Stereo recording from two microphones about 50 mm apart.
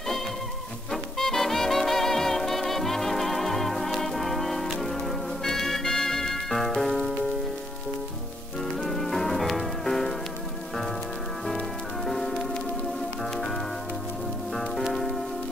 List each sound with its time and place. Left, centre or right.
1.1 s music: centre
5.4 s organ: centre
8.8 s music: centre
12.1 s music: centre
14.8 s music: centre